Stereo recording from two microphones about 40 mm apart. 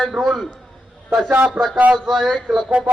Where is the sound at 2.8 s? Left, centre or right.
Right.